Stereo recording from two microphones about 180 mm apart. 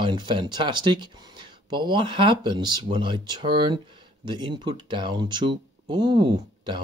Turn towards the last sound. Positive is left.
turn(degrees=-25)  # may be behind; listen again after turning